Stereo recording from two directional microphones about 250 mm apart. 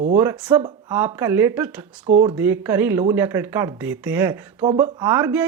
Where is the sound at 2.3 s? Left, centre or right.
Centre.